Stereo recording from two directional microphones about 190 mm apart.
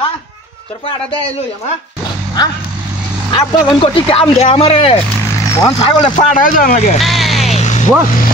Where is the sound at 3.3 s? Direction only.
25° left (ahead or behind).